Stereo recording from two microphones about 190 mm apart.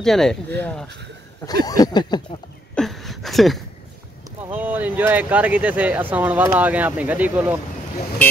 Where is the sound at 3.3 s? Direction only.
Centre (ahead or behind).